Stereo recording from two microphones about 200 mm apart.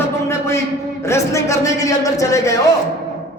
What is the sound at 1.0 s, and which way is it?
Speech, 15° left (ahead or behind).